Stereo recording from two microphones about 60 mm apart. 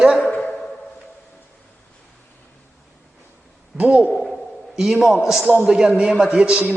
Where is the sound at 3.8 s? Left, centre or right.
Right.